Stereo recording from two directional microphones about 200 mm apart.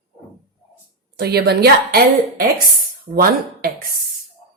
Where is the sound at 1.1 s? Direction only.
55° right (ahead or behind).